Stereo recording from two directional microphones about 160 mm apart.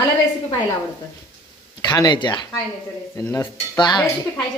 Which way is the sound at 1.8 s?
25° left (ahead or behind).